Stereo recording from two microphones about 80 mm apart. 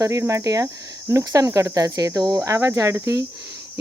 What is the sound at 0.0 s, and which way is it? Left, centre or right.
Speech, right.